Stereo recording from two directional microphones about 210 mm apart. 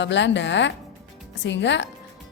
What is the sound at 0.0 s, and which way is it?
Speech, 60° left (ahead or behind).